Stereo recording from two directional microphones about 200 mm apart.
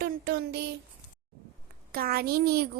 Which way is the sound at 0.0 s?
50° right (ahead or behind).